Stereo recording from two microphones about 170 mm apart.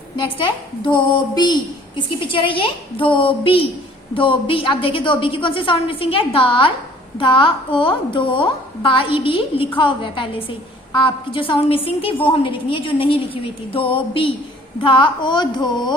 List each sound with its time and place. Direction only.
0.9 s a woman's voice: 25° left (ahead or behind)